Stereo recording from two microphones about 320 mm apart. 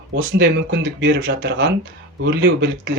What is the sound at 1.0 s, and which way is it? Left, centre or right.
Speech, right.